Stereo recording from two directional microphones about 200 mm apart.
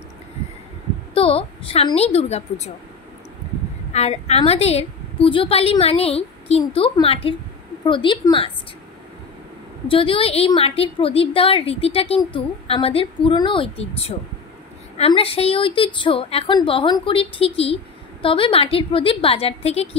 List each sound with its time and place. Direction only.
1.1 s a woman's voice: 25° left (ahead or behind)
3.9 s a woman's voice: 30° left (ahead or behind)
9.8 s a woman's voice: 25° left (ahead or behind)